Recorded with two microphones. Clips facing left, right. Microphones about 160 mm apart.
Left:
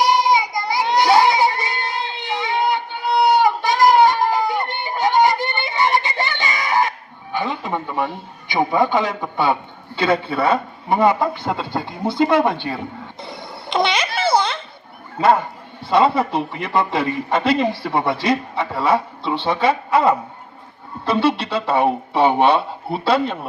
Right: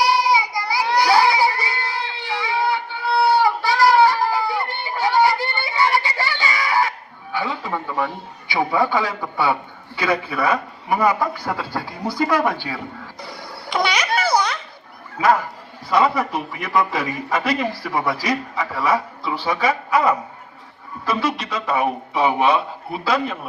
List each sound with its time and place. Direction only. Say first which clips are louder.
0.0 s baby cry: left 2 dB; 20° left (ahead or behind)
7.3 s a man's voice: left 2 dB; 20° left (ahead or behind)
13.2 s a sound: left 1 dB; 25° left (ahead or behind)
15.2 s a man's voice: left 2 dB; 30° left (ahead or behind)